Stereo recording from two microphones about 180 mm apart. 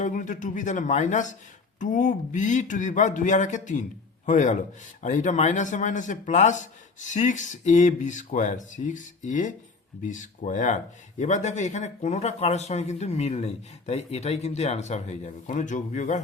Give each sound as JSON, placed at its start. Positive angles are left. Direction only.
{"t": 0.0, "sound": "speech", "side_deg": 45}